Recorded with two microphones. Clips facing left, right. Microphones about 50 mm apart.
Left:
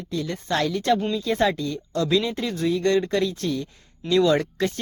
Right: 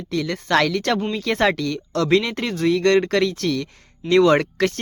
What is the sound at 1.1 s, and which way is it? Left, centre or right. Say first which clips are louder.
Speech: right 2 dB; right.